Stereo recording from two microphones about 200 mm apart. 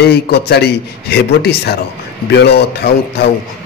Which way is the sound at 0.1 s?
55° left (ahead or behind).